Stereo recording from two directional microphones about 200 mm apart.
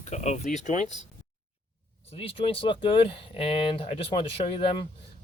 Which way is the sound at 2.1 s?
30° left (ahead or behind).